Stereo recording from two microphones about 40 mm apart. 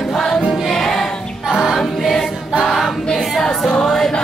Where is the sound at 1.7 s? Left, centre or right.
Centre.